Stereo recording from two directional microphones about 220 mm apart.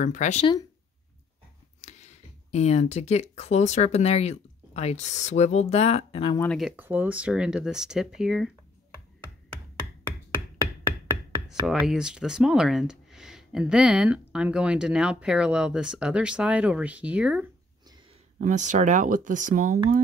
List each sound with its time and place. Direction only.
0.0 s speech: 35° left (ahead or behind)
1.8 s speech: 30° left (ahead or behind)
6.4 s speech: 5° left (ahead or behind)
6.8 s speech: 10° right (ahead or behind)
11.6 s speech: 5° right (ahead or behind)
18.4 s speech: 35° right (ahead or behind)